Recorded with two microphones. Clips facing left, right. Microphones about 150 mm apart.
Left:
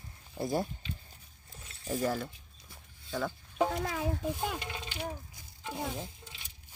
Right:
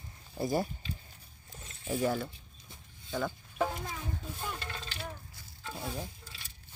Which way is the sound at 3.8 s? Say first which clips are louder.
Left 8 dB; 90° left.